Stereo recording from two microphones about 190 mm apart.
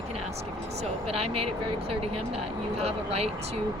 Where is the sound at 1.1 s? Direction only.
30° right (ahead or behind).